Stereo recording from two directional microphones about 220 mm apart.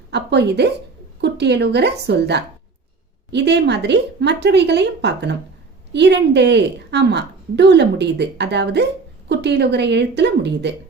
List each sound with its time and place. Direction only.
0.1 s a woman's voice: 50° right (ahead or behind)